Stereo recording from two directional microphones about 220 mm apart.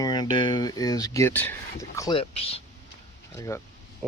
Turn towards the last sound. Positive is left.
turn(degrees=15)  # may be behind; listen again after turning